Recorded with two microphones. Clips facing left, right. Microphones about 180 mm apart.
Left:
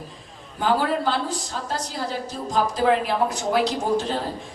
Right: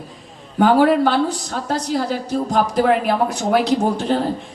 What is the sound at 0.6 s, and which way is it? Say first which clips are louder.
A woman's voice: right 8 dB; 70° right (ahead or behind).